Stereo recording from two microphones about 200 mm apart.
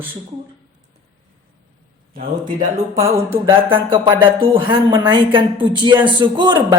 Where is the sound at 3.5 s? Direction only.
25° right (ahead or behind).